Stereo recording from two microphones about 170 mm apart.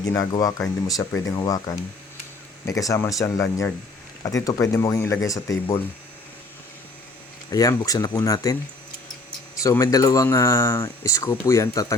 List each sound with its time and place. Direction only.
0.0 s speech: 20° left (ahead or behind)
7.5 s speech: 20° left (ahead or behind)
9.6 s speech: 20° left (ahead or behind)